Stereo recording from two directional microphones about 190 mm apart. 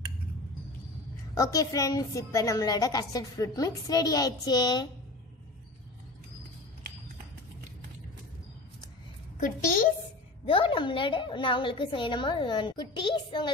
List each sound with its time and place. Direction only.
1.3 s a woman's voice: 15° left (ahead or behind)
10.4 s a woman's voice: 30° left (ahead or behind)